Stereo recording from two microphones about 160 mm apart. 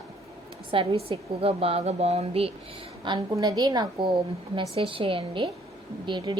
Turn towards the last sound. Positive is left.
turn(degrees=-30)  # may be behind; listen again after turning